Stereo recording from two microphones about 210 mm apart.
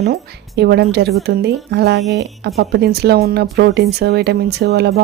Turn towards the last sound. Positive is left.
turn(degrees=-50)  # may be behind; listen again after turning